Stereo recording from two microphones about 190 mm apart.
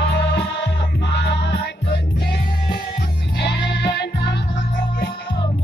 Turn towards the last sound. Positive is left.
turn(degrees=60)  # may be behind; listen again after turning